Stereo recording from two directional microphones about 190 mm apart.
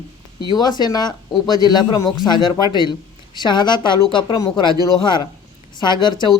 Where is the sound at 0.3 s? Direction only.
20° left (ahead or behind).